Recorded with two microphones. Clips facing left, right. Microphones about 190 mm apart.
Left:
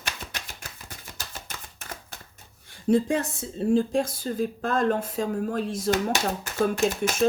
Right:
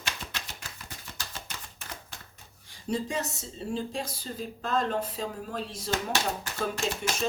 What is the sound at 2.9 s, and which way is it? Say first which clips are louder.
Speech: left 8 dB; 55° left (ahead or behind).